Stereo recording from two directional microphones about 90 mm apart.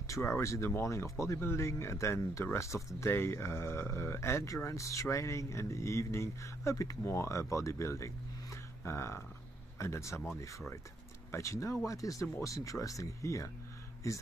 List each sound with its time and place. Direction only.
0.0 s speech: 30° left (ahead or behind)